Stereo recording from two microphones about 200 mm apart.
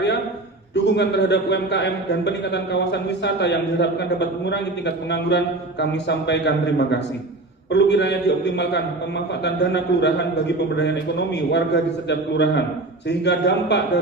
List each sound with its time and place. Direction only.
0.7 s a man's voice: 60° left (ahead or behind)